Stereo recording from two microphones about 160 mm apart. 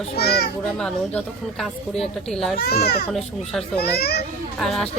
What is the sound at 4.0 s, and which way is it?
Speech, 85° left.